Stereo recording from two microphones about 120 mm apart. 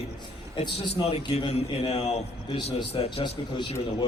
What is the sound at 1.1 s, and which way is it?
A man's voice, 50° left (ahead or behind).